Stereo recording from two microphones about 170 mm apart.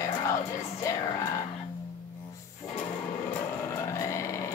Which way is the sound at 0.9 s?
20° left (ahead or behind).